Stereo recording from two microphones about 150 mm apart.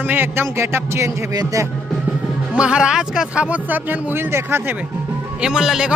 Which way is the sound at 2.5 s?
5° right (ahead or behind).